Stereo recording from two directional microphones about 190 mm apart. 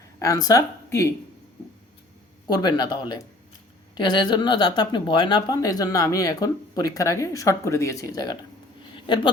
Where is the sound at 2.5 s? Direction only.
20° left (ahead or behind).